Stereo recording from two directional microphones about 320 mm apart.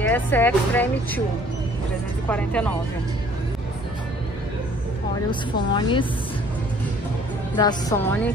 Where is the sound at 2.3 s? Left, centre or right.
Centre.